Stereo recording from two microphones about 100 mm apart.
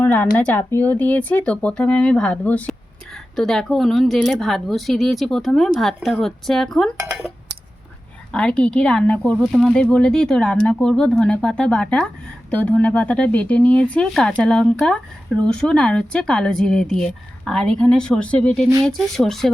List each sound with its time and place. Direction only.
0.0 s speech: 20° left (ahead or behind)
3.3 s speech: 5° left (ahead or behind)
8.3 s speech: 10° left (ahead or behind)